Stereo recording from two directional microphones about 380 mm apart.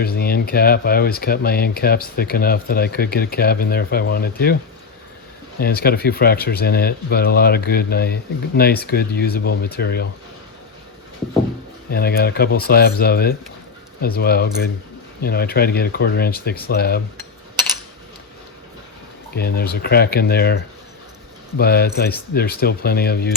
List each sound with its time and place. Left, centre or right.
0.0 s speech: left
5.5 s speech: left
11.9 s speech: left
19.4 s speech: left
21.6 s speech: left